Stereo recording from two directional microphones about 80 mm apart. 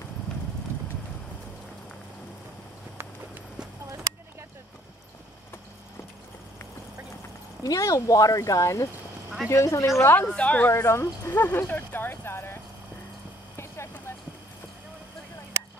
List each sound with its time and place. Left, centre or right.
7.6 s speech: left
10.0 s speech: left
10.7 s speech: left
13.6 s vehicle: left